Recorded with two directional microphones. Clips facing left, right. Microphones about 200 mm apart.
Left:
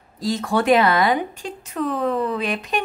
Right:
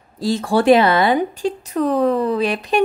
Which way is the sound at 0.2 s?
30° right (ahead or behind).